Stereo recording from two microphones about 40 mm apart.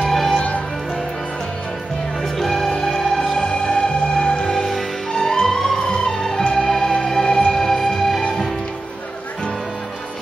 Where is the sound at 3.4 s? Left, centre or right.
Centre.